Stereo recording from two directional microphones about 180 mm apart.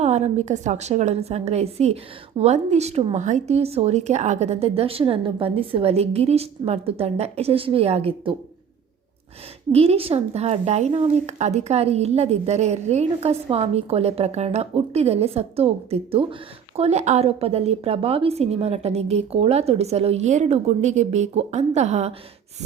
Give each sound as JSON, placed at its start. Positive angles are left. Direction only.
{"t": 0.0, "sound": "a woman's voice", "side_deg": -40}
{"t": 9.7, "sound": "a woman's voice", "side_deg": -35}